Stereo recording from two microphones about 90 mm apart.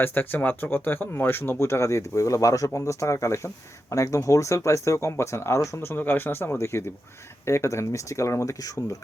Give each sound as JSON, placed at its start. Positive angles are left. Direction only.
{"t": 0.0, "sound": "speech", "side_deg": 20}